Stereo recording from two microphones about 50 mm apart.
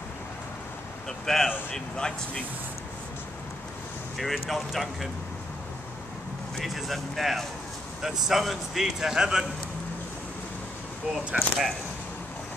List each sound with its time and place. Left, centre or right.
1.0 s a sound: centre
1.7 s speech: centre
4.2 s speech: centre
6.6 s speech: centre
11.3 s speech: centre